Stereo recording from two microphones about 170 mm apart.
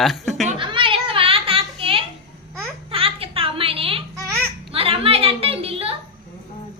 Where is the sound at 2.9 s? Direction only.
35° right (ahead or behind).